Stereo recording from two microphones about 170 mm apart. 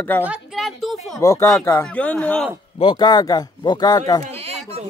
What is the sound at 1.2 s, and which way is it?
Speech, 15° left (ahead or behind).